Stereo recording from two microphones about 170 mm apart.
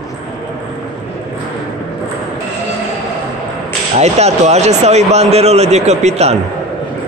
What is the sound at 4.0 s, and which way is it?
Speech, 40° right (ahead or behind).